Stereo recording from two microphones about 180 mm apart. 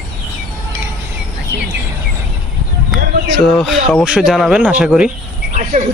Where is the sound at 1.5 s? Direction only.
75° right (ahead or behind).